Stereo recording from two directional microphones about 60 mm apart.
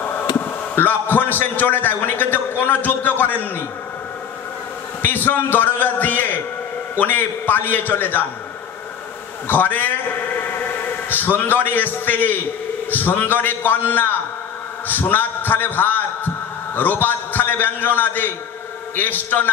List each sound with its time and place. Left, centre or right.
0.7 s a man's voice: left
5.0 s a man's voice: left
9.5 s a man's voice: left